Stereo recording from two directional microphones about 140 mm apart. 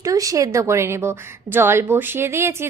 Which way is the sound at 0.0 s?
25° right (ahead or behind).